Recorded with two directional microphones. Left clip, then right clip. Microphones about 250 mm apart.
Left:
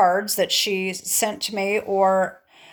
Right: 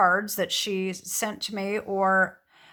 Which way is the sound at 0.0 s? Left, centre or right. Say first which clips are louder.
Left 4 dB; centre.